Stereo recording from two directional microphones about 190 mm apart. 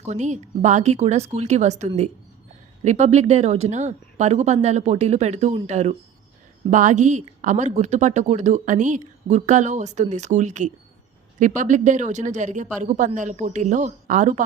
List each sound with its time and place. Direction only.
0.0 s speech: 40° right (ahead or behind)